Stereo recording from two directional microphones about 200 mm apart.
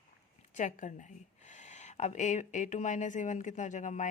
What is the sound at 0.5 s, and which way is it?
Speech, 40° left (ahead or behind).